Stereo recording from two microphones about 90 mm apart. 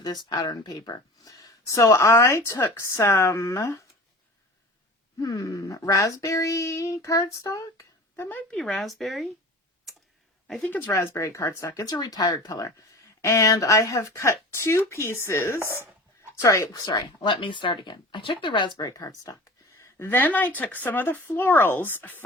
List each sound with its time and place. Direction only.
0.0 s speech: 50° left (ahead or behind); by 3.8 s 35° left (ahead or behind)
5.2 s speech: 40° left (ahead or behind)
8.2 s speech: 20° left (ahead or behind)
8.5 s speech: 5° left (ahead or behind)
10.6 s speech: 25° left (ahead or behind)
15.6 s speech: 25° right (ahead or behind)
16.4 s speech: 35° left (ahead or behind)
16.7 s speech: 50° left (ahead or behind)
18.8 s speech: 40° left (ahead or behind)
19.8 s speech: 25° left (ahead or behind)